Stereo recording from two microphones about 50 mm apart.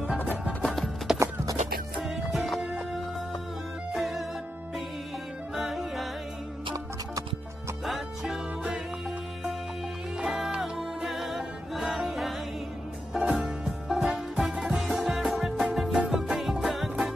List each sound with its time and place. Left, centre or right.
0.2 s music: left
1.1 s music: centre
2.0 s music: centre
2.6 s music: centre
3.9 s music: centre
5.5 s music: centre
7.8 s music: centre
10.1 s music: centre
10.6 s music: centre